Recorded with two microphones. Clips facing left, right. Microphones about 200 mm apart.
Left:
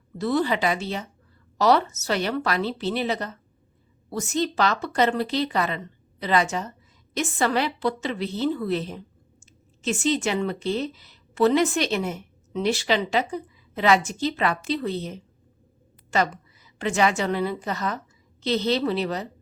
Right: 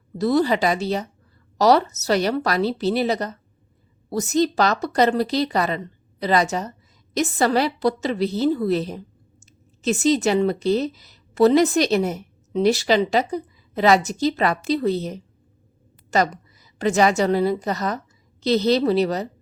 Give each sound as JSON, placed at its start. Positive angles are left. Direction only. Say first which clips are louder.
{"t": 0.2, "sound": "a woman's voice", "louder": "right 4 dB", "side_deg": -40}